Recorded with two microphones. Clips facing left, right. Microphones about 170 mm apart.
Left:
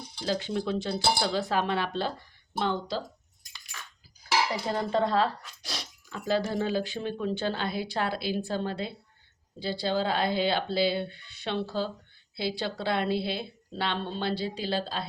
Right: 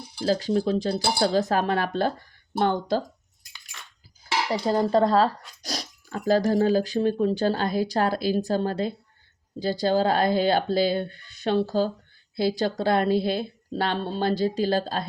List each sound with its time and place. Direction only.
0.2 s a woman's voice: 40° right (ahead or behind)
4.6 s a woman's voice: 35° right (ahead or behind)